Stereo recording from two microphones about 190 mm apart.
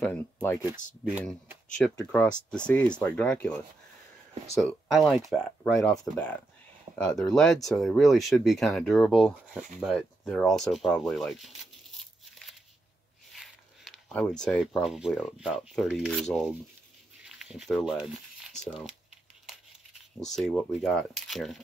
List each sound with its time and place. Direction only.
0.0 s speech: 10° left (ahead or behind)
2.0 s speech: 10° left (ahead or behind)
13.3 s speech: centre (ahead or behind)
17.2 s a sound: 5° right (ahead or behind)
20.2 s speech: centre (ahead or behind)